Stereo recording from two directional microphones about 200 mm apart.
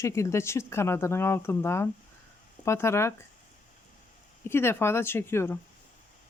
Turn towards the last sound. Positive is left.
turn(degrees=10)  # may be behind; listen again after turning